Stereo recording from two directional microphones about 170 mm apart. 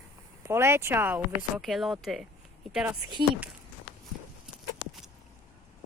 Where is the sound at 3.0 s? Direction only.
25° right (ahead or behind).